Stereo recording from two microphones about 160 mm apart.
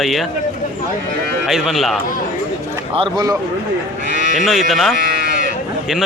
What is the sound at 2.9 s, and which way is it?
Speech, 30° right (ahead or behind).